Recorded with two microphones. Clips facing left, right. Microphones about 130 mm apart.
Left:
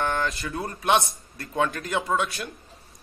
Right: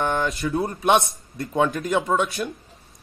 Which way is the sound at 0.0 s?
15° right (ahead or behind).